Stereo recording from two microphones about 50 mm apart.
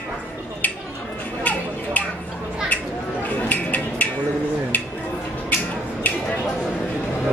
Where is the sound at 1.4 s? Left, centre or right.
Left.